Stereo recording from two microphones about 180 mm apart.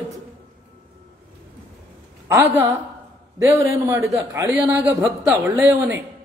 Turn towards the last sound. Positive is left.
turn(degrees=-10)  # may be behind; listen again after turning